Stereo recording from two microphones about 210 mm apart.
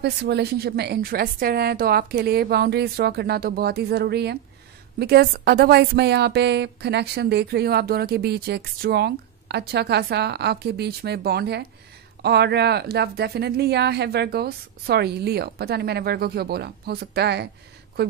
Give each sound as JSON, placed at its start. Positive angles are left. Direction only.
{"t": 0.0, "sound": "a woman's voice", "side_deg": -50}